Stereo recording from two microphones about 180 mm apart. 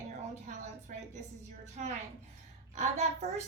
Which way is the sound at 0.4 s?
45° right (ahead or behind).